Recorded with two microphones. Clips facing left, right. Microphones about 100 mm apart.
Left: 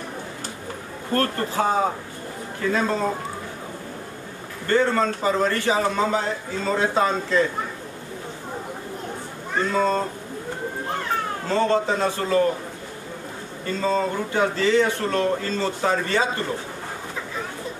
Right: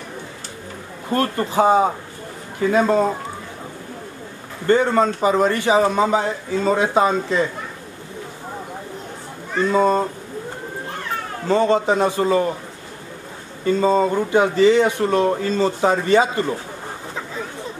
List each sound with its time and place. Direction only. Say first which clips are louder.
1.1 s a man's voice: right 4 dB; 15° right (ahead or behind)
4.6 s a man's voice: right 4 dB; 15° right (ahead or behind)
9.7 s a man's voice: right 5 dB; 15° right (ahead or behind)
11.4 s a man's voice: right 5 dB; 15° right (ahead or behind)
13.7 s a man's voice: right 6 dB; 15° right (ahead or behind)